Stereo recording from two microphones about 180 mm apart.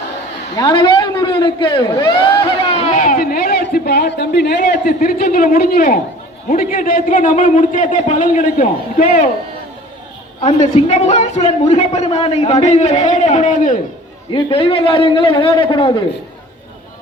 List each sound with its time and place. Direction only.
0.5 s a man's voice: 25° left (ahead or behind)
2.7 s a sound: 40° left (ahead or behind); by 4.8 s 65° left (ahead or behind)
4.9 s a man's voice: 50° left (ahead or behind)
10.4 s a man's voice: 40° left (ahead or behind)
14.3 s a man's voice: 30° left (ahead or behind)